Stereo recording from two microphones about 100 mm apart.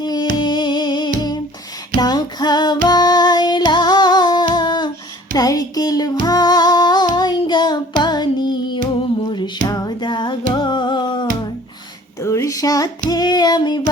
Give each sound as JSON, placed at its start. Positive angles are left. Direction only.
{"t": 0.0, "sound": "music", "side_deg": 45}
{"t": 12.2, "sound": "female singing", "side_deg": 30}